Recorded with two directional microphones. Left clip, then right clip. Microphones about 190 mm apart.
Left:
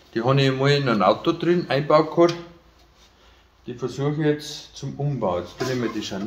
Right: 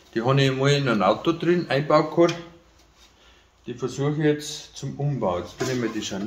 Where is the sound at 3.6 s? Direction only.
10° left (ahead or behind).